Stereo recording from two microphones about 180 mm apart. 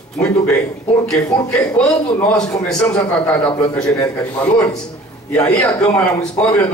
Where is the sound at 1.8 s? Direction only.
5° left (ahead or behind).